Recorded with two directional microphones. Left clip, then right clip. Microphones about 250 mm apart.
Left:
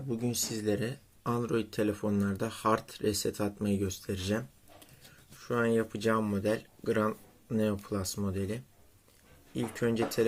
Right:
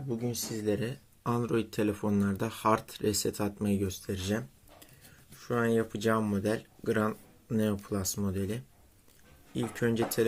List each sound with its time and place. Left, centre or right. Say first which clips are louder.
0.1 s speech: left 1 dB; centre